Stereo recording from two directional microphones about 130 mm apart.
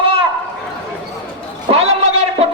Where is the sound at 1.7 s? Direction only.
55° right (ahead or behind).